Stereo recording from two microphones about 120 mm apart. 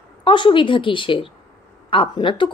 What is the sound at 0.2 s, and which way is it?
A woman's voice, 45° left (ahead or behind).